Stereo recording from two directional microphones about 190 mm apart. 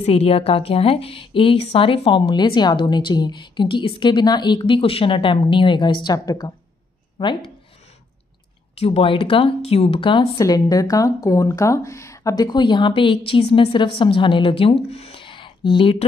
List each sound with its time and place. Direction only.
0.0 s a woman's voice: 30° left (ahead or behind)
8.7 s a woman's voice: 30° left (ahead or behind)